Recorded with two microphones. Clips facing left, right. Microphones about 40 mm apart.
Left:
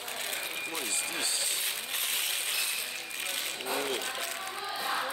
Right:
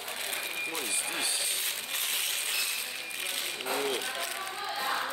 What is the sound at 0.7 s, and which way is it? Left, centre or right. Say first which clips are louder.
Speech: right 1 dB; centre.